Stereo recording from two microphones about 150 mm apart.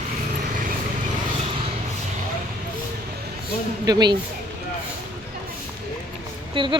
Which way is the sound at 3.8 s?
25° right (ahead or behind).